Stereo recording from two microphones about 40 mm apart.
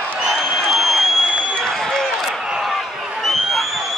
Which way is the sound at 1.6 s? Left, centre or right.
Centre.